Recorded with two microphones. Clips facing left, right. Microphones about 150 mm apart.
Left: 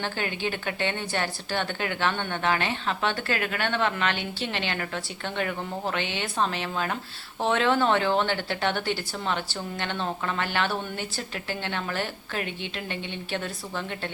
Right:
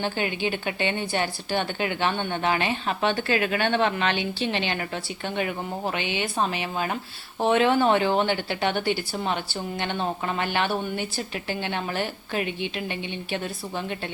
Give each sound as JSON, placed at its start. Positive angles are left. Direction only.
{"t": 0.0, "sound": "a woman's voice", "side_deg": -15}